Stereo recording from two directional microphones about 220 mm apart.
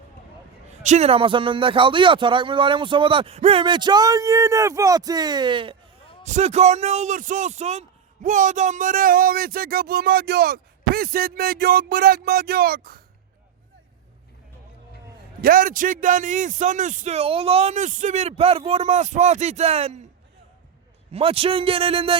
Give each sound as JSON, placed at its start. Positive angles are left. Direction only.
{"t": 0.7, "sound": "a man's voice", "side_deg": -30}
{"t": 15.4, "sound": "a man's voice", "side_deg": -40}
{"t": 21.1, "sound": "a man's voice", "side_deg": -25}